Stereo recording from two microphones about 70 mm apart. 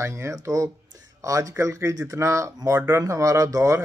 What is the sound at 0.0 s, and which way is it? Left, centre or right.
Speech, right.